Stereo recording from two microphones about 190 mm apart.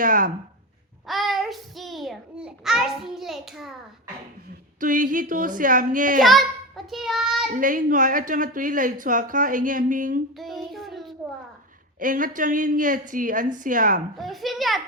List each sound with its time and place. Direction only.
0.0 s a woman's voice: 45° right (ahead or behind)
1.0 s a child's voice: centre (ahead or behind)
4.8 s a woman's voice: 45° right (ahead or behind)
6.2 s a child's voice: centre (ahead or behind)
7.5 s a woman's voice: 45° right (ahead or behind)
10.3 s a child's voice: centre (ahead or behind)
11.9 s a woman's voice: 45° right (ahead or behind)
14.2 s a child's voice: centre (ahead or behind)